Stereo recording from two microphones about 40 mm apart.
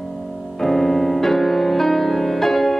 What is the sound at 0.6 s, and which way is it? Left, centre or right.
Music, centre.